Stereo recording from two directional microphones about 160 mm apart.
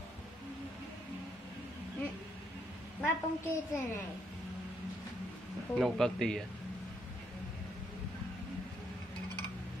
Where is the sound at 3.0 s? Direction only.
15° left (ahead or behind).